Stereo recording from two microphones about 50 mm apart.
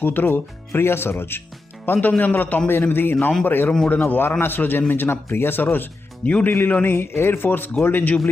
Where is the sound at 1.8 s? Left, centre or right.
Left.